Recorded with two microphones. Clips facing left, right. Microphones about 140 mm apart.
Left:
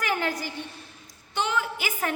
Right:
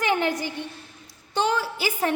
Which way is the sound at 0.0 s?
25° right (ahead or behind).